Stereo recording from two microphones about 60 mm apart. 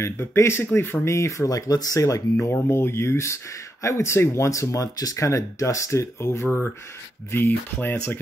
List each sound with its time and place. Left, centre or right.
0.0 s speech: left
2.7 s speech: left
6.4 s speech: left